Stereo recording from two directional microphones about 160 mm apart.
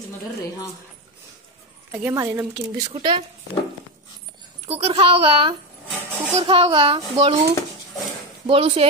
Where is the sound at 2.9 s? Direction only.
30° right (ahead or behind).